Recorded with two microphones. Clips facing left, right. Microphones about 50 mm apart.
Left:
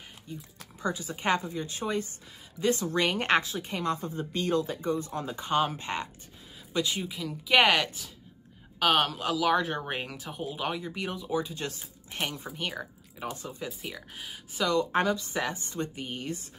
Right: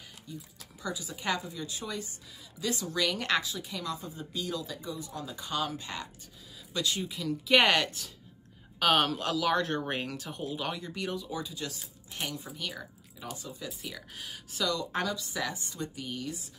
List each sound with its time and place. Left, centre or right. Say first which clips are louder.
0.6 s a woman's voice: left 5 dB; left
6.7 s speech: left 2 dB; centre
7.1 s a woman's voice: right 1 dB; centre; by 13.5 s left
13.7 s speech: left 2 dB; centre
14.6 s a woman's voice: left 5 dB; left